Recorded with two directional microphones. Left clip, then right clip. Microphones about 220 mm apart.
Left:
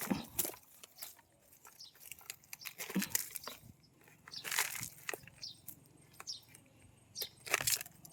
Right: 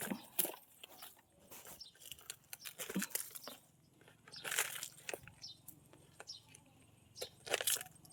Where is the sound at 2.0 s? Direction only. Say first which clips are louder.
Left 2 dB; 10° right (ahead or behind).